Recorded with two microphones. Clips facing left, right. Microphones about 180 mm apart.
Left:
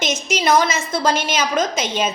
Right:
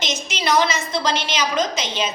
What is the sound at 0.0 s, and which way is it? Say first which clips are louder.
A woman's voice: left 5 dB; 50° left (ahead or behind).